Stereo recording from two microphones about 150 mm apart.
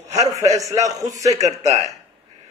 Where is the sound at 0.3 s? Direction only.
20° right (ahead or behind).